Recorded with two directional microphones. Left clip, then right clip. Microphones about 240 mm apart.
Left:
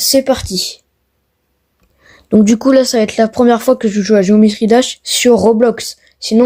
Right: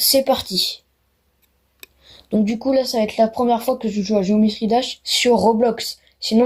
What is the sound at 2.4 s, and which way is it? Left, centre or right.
Speech, left.